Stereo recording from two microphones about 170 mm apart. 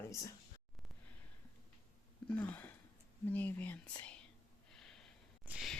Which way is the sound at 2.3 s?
10° left (ahead or behind).